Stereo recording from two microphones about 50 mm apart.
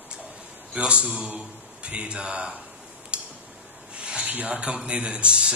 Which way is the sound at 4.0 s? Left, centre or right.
Centre.